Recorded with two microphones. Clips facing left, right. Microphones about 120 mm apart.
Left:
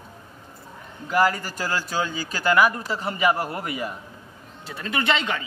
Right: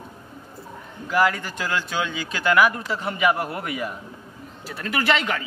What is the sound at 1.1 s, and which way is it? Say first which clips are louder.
Speech: even; 5° left (ahead or behind).